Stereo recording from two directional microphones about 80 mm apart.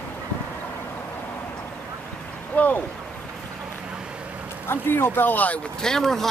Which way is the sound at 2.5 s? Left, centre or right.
Centre.